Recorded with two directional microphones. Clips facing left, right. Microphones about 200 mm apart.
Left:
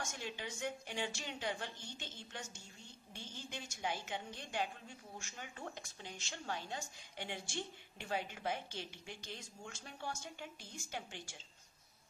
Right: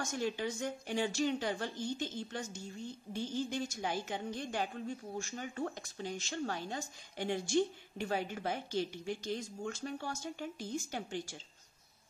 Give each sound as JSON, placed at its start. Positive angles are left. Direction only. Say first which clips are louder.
{"t": 0.0, "sound": "speech", "louder": "right 9 dB", "side_deg": -40}